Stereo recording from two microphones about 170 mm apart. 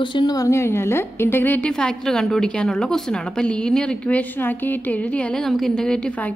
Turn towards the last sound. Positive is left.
turn(degrees=5)  # may be behind; listen again after turning